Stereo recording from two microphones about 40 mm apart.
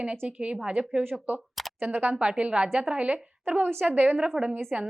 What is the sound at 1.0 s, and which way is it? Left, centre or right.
Speech, right.